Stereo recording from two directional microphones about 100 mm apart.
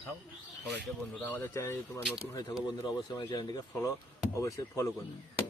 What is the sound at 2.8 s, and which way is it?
Speech, 40° left (ahead or behind).